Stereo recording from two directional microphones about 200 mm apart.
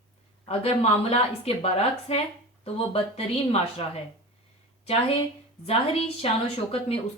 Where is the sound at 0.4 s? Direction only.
30° left (ahead or behind).